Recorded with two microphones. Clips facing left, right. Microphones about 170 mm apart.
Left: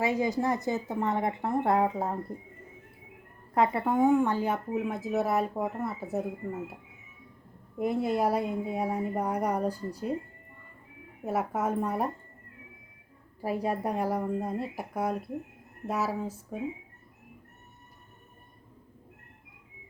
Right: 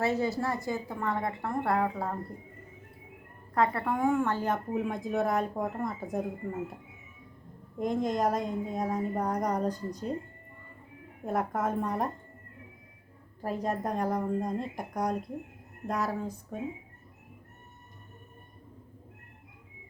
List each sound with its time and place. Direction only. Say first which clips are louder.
0.0 s speech: left 1 dB; 15° left (ahead or behind)
3.5 s speech: left 2 dB; 20° left (ahead or behind)
7.8 s speech: left 1 dB; 10° left (ahead or behind)
11.2 s speech: left 1 dB; 5° left (ahead or behind)
13.4 s speech: left 2 dB; 10° left (ahead or behind)